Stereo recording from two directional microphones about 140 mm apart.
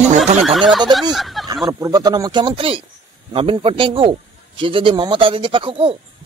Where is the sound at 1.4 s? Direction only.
25° right (ahead or behind).